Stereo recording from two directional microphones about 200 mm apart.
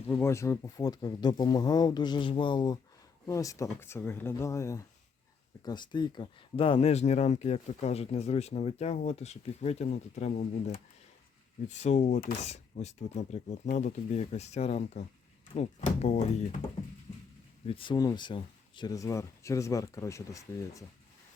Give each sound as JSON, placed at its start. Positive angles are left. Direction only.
{"t": 0.1, "sound": "speech", "side_deg": 15}
{"t": 17.7, "sound": "speech", "side_deg": 25}